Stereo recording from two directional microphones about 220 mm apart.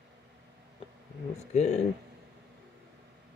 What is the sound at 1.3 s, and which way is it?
Speech, 30° left (ahead or behind).